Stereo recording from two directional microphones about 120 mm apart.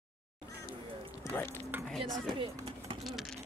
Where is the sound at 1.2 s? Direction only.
20° left (ahead or behind).